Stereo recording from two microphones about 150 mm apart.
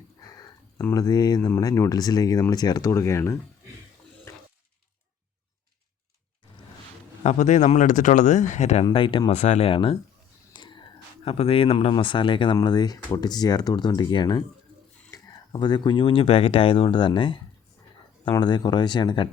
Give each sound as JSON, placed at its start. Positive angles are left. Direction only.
{"t": 0.9, "sound": "speech", "side_deg": 25}
{"t": 7.2, "sound": "speech", "side_deg": 50}
{"t": 9.3, "sound": "speech", "side_deg": 50}
{"t": 10.5, "sound": "whispering", "side_deg": 30}
{"t": 11.3, "sound": "speech", "side_deg": 40}